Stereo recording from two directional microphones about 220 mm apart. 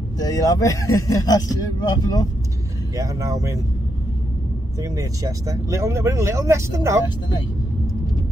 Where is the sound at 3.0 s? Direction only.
15° right (ahead or behind).